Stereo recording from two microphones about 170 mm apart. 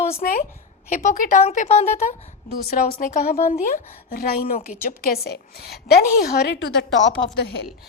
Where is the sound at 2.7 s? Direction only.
60° left (ahead or behind).